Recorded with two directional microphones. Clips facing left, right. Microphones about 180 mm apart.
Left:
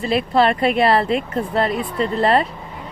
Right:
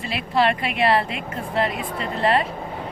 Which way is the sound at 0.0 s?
35° left (ahead or behind).